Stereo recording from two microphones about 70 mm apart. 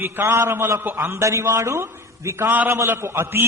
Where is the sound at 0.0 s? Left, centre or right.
Right.